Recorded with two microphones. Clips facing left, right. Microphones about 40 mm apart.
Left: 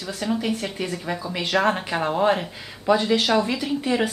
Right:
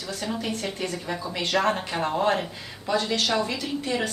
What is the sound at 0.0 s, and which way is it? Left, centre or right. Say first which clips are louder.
Speech: left 4 dB; centre.